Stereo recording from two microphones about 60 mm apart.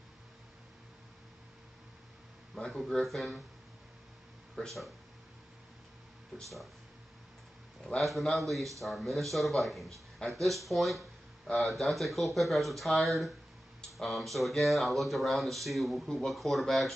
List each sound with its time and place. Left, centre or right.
2.6 s speech: centre
4.6 s speech: centre
6.3 s speech: centre
8.0 s speech: centre